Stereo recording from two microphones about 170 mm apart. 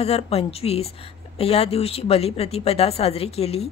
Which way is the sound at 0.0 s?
35° left (ahead or behind).